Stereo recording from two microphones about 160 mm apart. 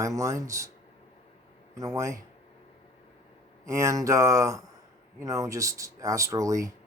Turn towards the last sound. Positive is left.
turn(degrees=-20)  # may be behind; listen again after turning